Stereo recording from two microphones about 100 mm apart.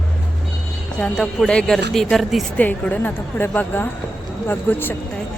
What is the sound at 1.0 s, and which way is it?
A woman's voice, 5° left (ahead or behind).